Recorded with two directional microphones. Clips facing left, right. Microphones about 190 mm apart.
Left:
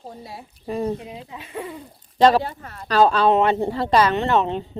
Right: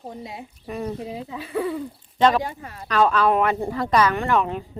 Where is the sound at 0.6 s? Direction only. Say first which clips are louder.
Left 5 dB; 30° left (ahead or behind).